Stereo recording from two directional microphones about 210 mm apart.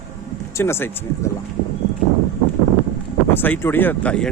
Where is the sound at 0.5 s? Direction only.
10° left (ahead or behind).